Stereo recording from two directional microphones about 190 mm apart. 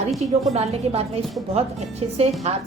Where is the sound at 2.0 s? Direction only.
30° right (ahead or behind).